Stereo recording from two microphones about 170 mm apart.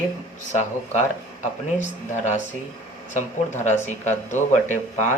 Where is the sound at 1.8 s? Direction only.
45° left (ahead or behind).